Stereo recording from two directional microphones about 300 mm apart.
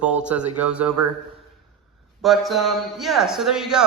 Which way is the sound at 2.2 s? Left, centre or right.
Centre.